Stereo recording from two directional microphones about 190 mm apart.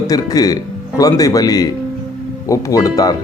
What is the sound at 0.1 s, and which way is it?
Speech, 20° left (ahead or behind).